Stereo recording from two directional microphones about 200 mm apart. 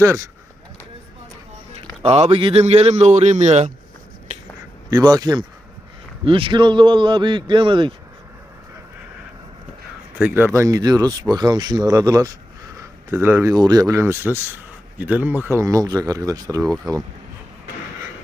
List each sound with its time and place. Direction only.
1.7 s a man's voice: 30° right (ahead or behind)
4.9 s a man's voice: 20° right (ahead or behind)
10.2 s speech: 10° right (ahead or behind)
16.6 s speech: 5° left (ahead or behind)